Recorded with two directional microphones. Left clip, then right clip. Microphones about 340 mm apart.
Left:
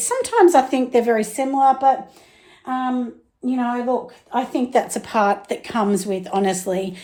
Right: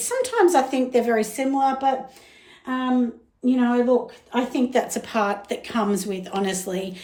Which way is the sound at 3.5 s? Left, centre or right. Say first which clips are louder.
Right 2 dB; centre.